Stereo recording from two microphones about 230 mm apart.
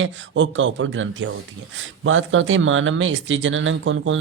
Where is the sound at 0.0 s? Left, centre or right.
Right.